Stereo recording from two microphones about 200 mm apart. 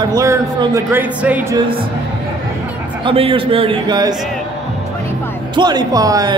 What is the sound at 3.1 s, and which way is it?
A man's voice, 25° right (ahead or behind).